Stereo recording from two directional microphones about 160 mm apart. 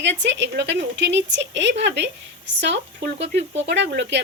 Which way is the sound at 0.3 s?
90° right.